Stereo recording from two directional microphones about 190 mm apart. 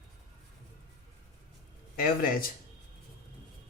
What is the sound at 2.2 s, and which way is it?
Speech, 50° left (ahead or behind).